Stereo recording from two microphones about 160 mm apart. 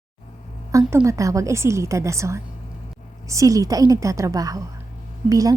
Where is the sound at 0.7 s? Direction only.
20° right (ahead or behind).